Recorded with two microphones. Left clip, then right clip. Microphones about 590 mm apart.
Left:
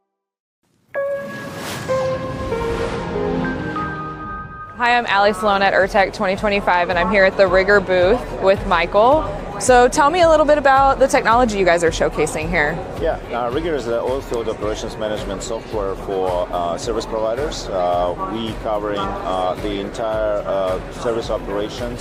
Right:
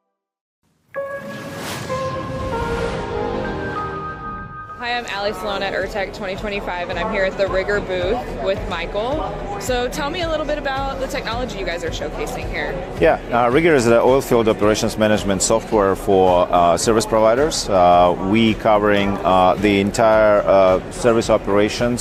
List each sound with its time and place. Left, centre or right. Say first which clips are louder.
2.6 s music: even; centre
4.8 s speech: left 8 dB; left
13.1 s speech: right 6 dB; right